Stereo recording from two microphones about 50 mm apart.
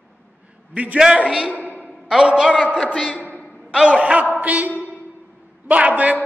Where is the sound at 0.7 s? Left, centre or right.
Right.